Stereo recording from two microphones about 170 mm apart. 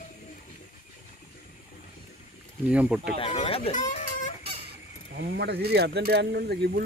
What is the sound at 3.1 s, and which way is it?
Speech, 35° left (ahead or behind).